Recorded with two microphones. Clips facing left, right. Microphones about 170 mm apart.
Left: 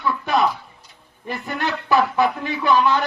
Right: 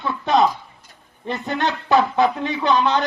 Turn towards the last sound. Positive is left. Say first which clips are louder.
# even
turn(degrees=-20)  # may be behind; listen again after turning